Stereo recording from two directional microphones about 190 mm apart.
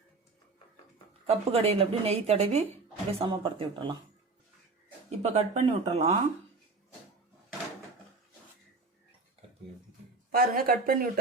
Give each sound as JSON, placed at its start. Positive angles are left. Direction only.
{"t": 1.3, "sound": "a woman's voice", "side_deg": -30}
{"t": 5.0, "sound": "a woman's voice", "side_deg": -35}
{"t": 10.3, "sound": "speech", "side_deg": -50}